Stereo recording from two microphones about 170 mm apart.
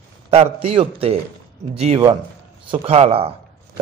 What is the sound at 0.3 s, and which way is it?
A man's voice, 35° right (ahead or behind).